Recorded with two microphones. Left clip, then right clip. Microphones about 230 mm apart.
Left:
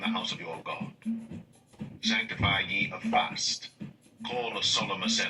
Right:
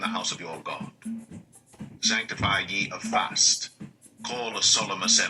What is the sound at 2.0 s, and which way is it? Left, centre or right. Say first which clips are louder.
Speech: right 3 dB; right.